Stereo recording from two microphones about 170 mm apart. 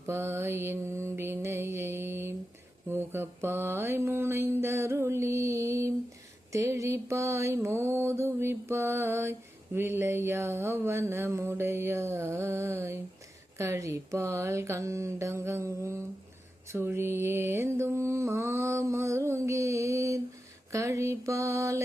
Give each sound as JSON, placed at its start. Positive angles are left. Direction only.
{"t": 0.1, "sound": "mantra", "side_deg": -15}